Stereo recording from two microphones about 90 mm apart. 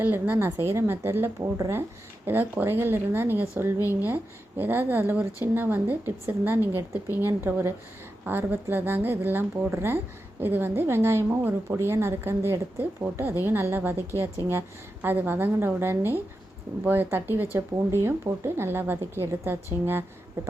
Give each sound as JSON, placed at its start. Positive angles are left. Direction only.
{"t": 0.0, "sound": "a woman's voice", "side_deg": -20}
{"t": 15.0, "sound": "a woman's voice", "side_deg": -25}